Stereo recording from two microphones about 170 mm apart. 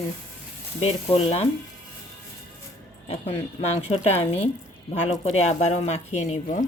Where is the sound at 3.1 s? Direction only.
40° left (ahead or behind).